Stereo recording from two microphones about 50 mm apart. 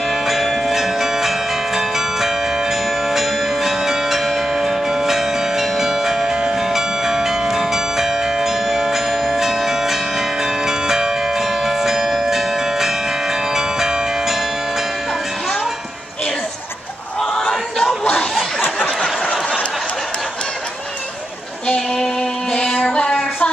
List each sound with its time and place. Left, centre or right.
0.1 s music: centre
17.5 s a sound: centre
21.6 s music: centre
22.8 s child singing: left